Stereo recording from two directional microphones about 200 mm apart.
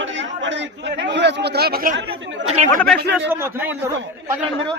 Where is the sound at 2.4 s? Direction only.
35° right (ahead or behind).